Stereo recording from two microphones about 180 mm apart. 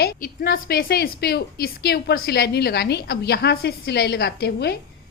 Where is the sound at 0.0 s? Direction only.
55° left (ahead or behind).